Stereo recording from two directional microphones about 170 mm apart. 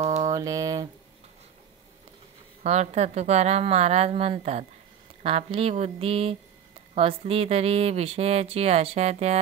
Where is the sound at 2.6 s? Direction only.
40° right (ahead or behind).